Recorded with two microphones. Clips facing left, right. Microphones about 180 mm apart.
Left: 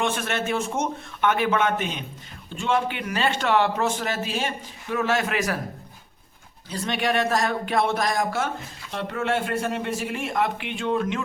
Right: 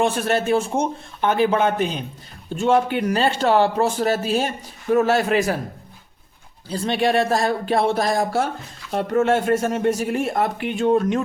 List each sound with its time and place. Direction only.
0.0 s a man's voice: 35° right (ahead or behind)
6.7 s a man's voice: 30° right (ahead or behind)